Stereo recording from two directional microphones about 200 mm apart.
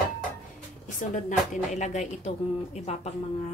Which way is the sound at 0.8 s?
40° left (ahead or behind).